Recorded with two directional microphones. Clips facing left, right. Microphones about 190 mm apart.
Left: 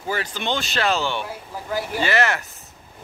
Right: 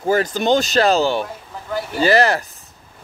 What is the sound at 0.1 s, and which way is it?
Speech, 45° right (ahead or behind).